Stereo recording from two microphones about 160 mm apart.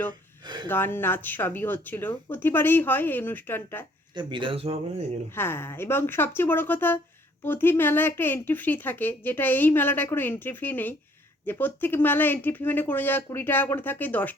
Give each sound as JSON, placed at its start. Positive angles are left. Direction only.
{"t": 0.1, "sound": "a sound", "side_deg": -25}
{"t": 0.7, "sound": "speech", "side_deg": 15}
{"t": 4.1, "sound": "speech", "side_deg": -30}
{"t": 5.3, "sound": "speech", "side_deg": 15}